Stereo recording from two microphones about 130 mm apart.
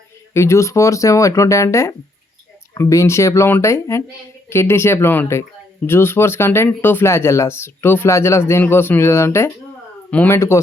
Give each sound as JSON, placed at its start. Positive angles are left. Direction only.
{"t": 0.3, "sound": "speech", "side_deg": 20}